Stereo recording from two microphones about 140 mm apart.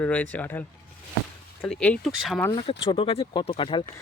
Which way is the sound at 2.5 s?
40° left (ahead or behind).